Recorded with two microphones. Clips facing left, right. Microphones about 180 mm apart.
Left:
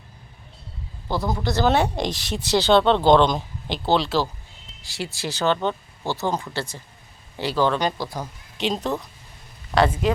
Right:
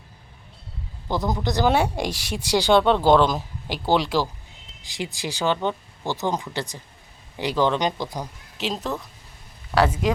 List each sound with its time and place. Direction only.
1.0 s speech: 15° right (ahead or behind)
8.5 s a woman's voice: centre (ahead or behind)